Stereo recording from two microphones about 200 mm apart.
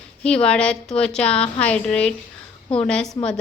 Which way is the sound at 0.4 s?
5° left (ahead or behind).